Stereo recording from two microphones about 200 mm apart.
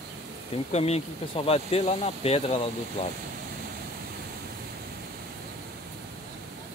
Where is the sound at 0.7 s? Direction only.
30° left (ahead or behind).